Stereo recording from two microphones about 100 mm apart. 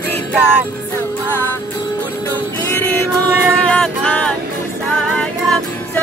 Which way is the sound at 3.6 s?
10° left (ahead or behind).